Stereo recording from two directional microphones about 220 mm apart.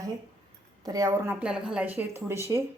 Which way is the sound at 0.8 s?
15° right (ahead or behind).